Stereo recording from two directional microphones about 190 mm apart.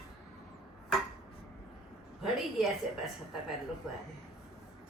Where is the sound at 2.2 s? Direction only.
Centre (ahead or behind).